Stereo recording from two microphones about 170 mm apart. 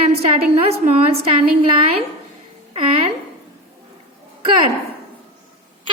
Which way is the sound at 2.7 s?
35° right (ahead or behind).